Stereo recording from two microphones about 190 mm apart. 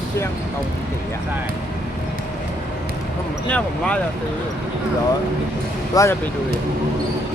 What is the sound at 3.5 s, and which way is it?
Speech, 5° left (ahead or behind).